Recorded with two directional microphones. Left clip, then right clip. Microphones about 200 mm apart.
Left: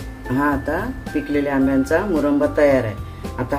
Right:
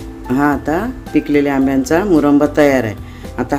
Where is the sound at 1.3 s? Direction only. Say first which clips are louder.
Right 4 dB; 55° right (ahead or behind).